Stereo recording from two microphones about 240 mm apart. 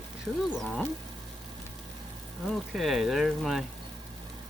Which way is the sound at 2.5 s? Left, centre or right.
Centre.